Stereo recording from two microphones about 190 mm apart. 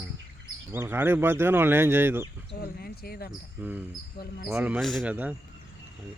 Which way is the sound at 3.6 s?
10° right (ahead or behind).